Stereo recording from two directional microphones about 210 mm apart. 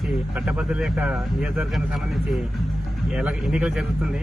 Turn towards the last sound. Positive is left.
turn(degrees=-5)  # may be behind; listen again after turning